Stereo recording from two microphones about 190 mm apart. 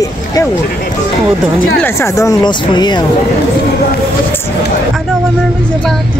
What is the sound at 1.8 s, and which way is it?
Speech, 15° left (ahead or behind).